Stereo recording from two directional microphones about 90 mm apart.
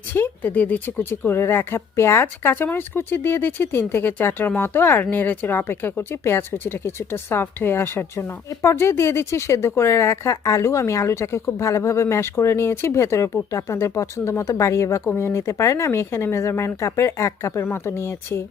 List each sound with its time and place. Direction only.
0.1 s speech: 20° left (ahead or behind)